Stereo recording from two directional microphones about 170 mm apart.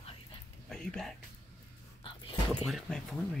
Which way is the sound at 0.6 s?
5° left (ahead or behind).